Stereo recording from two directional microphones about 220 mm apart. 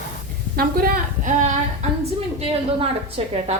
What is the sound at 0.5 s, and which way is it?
A woman's voice, 40° right (ahead or behind).